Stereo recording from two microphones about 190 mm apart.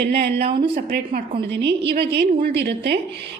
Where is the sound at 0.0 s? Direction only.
60° right (ahead or behind).